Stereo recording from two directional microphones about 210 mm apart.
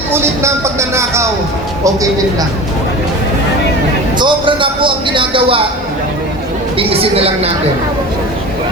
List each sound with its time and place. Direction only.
0.1 s speech: 10° right (ahead or behind)
4.2 s a man's voice: 25° right (ahead or behind)
6.7 s a man's voice: 25° right (ahead or behind)